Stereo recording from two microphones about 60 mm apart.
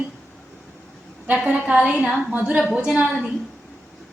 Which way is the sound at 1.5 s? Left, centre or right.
Right.